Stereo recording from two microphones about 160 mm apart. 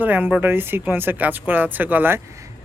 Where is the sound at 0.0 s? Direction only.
10° right (ahead or behind).